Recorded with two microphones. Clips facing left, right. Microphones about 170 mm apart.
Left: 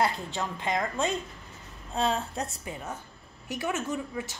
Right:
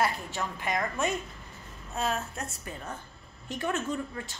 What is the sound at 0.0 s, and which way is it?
A woman's voice, 20° left (ahead or behind).